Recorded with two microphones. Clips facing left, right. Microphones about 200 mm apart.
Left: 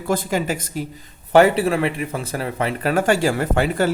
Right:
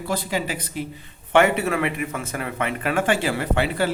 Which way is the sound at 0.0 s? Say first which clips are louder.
Left 4 dB; 50° left (ahead or behind).